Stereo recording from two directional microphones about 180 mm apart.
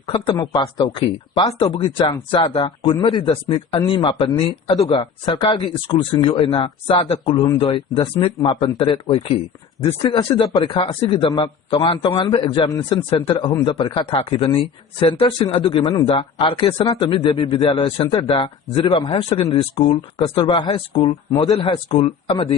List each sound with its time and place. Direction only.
0.0 s speech: 25° left (ahead or behind)